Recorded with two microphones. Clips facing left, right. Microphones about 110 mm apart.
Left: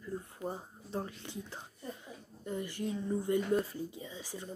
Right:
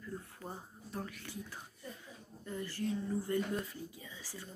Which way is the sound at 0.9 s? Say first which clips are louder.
Left 4 dB; 25° left (ahead or behind).